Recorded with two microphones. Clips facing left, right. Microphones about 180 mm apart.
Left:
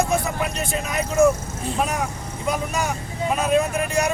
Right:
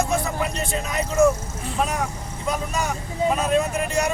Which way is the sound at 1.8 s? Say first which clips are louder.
Right 1 dB; centre (ahead or behind).